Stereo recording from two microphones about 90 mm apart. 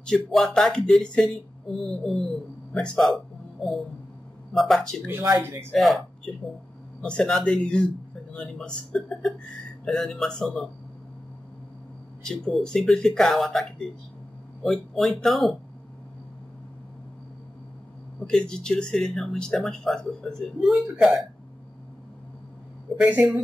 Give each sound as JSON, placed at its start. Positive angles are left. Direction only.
{"t": 0.0, "sound": "speech", "side_deg": 5}
{"t": 4.6, "sound": "speech", "side_deg": 0}
{"t": 5.0, "sound": "speech", "side_deg": -25}
{"t": 5.7, "sound": "speech", "side_deg": 0}
{"t": 7.0, "sound": "speech", "side_deg": 10}
{"t": 12.2, "sound": "speech", "side_deg": 5}
{"t": 18.2, "sound": "speech", "side_deg": 10}
{"t": 22.9, "sound": "speech", "side_deg": -15}